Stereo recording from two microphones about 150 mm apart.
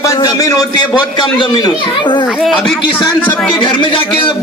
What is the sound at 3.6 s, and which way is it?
Speech, 35° left (ahead or behind).